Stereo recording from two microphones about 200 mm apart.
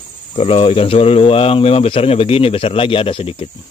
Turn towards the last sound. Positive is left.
turn(degrees=25)  # may be behind; listen again after turning